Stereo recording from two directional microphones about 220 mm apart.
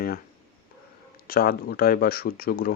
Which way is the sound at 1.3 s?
40° left (ahead or behind).